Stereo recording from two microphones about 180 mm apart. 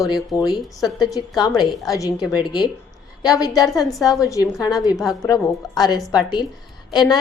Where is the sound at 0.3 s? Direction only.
20° left (ahead or behind).